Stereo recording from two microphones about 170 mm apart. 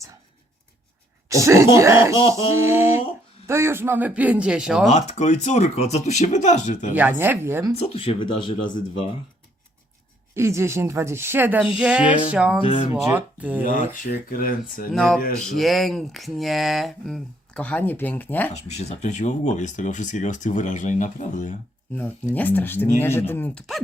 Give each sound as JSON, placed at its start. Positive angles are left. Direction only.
{"t": 1.3, "sound": "speech", "side_deg": -20}
{"t": 4.9, "sound": "speech", "side_deg": 40}
{"t": 7.2, "sound": "speech", "side_deg": -15}
{"t": 7.8, "sound": "speech", "side_deg": 35}
{"t": 10.3, "sound": "speech", "side_deg": -15}
{"t": 13.9, "sound": "speech", "side_deg": 55}
{"t": 14.9, "sound": "speech", "side_deg": 0}
{"t": 18.5, "sound": "speech", "side_deg": 40}
{"t": 21.9, "sound": "speech", "side_deg": 10}